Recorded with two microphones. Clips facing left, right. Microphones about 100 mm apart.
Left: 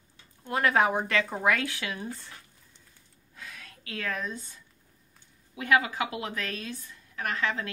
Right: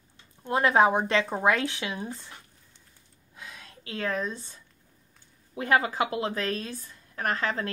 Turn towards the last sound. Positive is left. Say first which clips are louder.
# right 2 dB
turn(degrees=-40)  # may be behind; listen again after turning